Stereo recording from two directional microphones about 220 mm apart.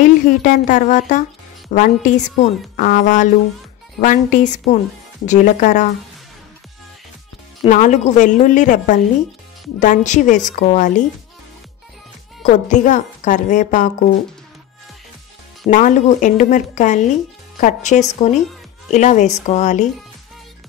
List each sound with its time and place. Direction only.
0.0 s a woman's voice: 35° left (ahead or behind)
7.6 s a woman's voice: 35° left (ahead or behind)
12.4 s a woman's voice: 35° left (ahead or behind)
15.7 s a woman's voice: 35° left (ahead or behind)